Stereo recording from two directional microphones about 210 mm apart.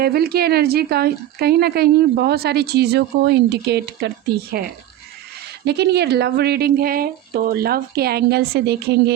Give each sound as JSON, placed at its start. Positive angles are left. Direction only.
{"t": 0.0, "sound": "speech", "side_deg": -50}